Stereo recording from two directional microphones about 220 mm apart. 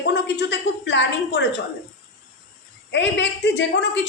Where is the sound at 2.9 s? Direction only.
55° left (ahead or behind).